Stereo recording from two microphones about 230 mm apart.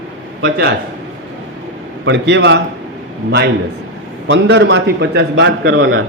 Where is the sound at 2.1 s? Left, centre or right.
Right.